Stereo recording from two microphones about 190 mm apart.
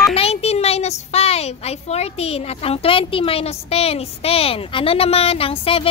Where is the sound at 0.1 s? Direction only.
30° left (ahead or behind).